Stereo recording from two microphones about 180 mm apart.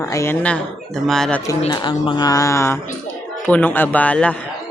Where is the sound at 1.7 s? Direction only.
25° left (ahead or behind); by 4.5 s 5° left (ahead or behind).